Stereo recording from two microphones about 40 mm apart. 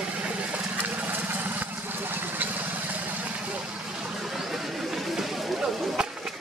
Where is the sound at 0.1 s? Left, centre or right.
Right.